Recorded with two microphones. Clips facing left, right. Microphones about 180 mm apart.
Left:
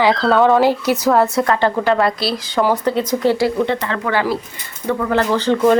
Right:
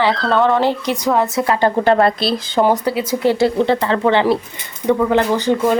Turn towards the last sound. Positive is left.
turn(degrees=-10)  # may be behind; listen again after turning